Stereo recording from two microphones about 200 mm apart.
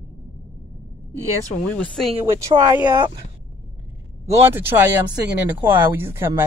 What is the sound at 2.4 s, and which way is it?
Speech, 20° right (ahead or behind).